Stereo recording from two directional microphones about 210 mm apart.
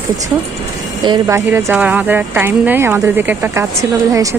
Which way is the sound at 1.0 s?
15° right (ahead or behind).